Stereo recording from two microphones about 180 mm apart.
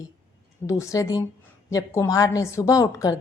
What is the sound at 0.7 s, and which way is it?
A woman's voice, 15° left (ahead or behind).